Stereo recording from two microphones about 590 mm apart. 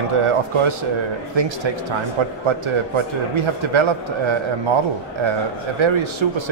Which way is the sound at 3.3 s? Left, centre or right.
Right.